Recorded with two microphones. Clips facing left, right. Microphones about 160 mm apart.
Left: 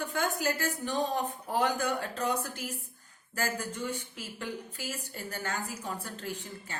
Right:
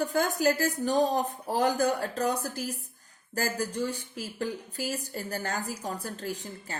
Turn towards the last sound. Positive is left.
turn(degrees=-40)  # may be behind; listen again after turning